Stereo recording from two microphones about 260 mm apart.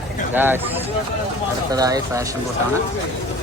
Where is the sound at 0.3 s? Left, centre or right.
Centre.